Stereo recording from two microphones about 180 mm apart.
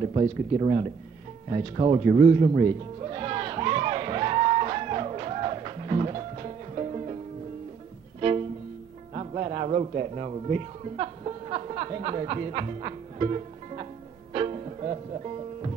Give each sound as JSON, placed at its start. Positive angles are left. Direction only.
{"t": 0.0, "sound": "speech", "side_deg": -30}
{"t": 1.5, "sound": "music", "side_deg": -30}
{"t": 8.2, "sound": "music", "side_deg": -35}
{"t": 9.1, "sound": "speech", "side_deg": -35}
{"t": 14.3, "sound": "music", "side_deg": -35}